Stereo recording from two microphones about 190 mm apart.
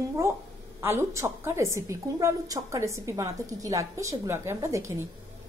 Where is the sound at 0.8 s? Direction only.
15° right (ahead or behind).